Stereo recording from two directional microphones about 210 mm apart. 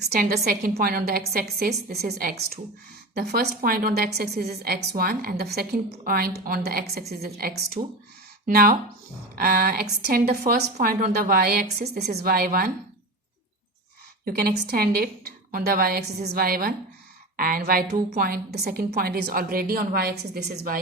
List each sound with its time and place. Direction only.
0.1 s a woman's voice: 45° right (ahead or behind)
3.2 s a woman's voice: 45° right (ahead or behind)
14.3 s a woman's voice: 45° right (ahead or behind)